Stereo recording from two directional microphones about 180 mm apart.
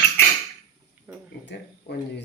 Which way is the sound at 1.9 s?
70° left (ahead or behind).